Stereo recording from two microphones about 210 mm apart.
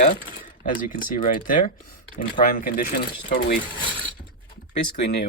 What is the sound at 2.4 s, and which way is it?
Speech, 40° left (ahead or behind).